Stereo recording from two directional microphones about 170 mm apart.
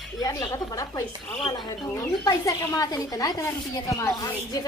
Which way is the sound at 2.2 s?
20° left (ahead or behind).